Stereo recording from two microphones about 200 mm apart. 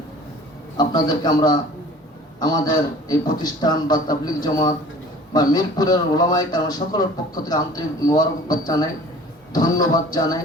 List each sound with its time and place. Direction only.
0.8 s a man's voice: 20° left (ahead or behind)